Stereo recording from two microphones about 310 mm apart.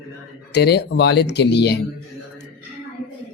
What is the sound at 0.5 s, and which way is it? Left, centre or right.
Speech, left.